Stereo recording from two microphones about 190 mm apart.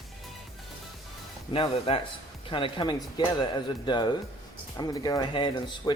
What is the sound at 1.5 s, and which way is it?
Speech, 30° left (ahead or behind).